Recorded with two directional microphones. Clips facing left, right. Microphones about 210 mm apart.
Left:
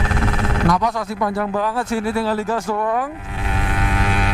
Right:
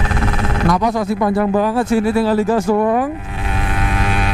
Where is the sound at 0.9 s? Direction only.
25° right (ahead or behind).